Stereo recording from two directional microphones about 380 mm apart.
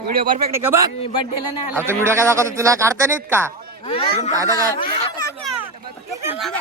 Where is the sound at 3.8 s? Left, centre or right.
Centre.